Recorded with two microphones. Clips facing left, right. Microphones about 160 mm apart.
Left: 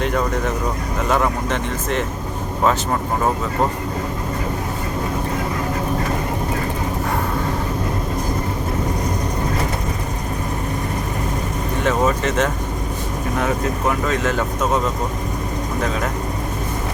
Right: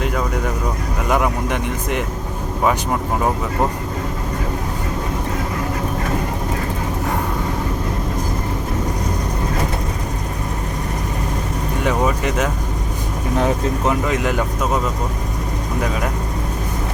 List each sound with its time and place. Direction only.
0.0 s speech: 5° right (ahead or behind)
11.9 s speech: 10° right (ahead or behind)
13.3 s speech: 30° right (ahead or behind)
14.0 s speech: 15° right (ahead or behind)